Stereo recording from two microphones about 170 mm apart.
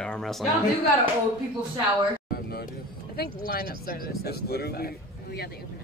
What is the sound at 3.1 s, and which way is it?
Speech, 60° left (ahead or behind).